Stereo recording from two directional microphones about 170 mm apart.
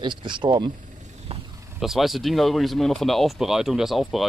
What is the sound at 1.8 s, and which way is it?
Speech, centre (ahead or behind).